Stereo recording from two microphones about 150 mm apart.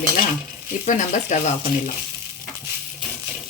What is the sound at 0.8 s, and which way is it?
Speech, 55° left (ahead or behind).